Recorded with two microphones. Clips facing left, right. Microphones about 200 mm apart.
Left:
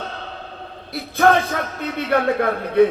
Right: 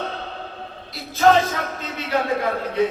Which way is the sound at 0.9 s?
60° left (ahead or behind).